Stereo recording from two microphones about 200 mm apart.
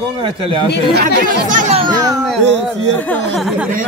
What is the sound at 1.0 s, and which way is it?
Speech, 40° right (ahead or behind).